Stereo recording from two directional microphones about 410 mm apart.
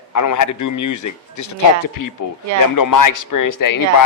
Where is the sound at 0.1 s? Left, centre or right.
Left.